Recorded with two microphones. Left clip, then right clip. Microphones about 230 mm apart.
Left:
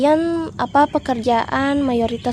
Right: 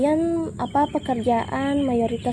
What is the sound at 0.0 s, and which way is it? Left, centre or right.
Speech, left.